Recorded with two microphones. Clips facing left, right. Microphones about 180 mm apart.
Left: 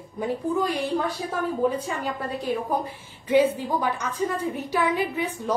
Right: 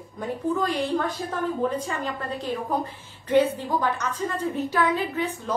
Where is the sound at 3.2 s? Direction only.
10° left (ahead or behind).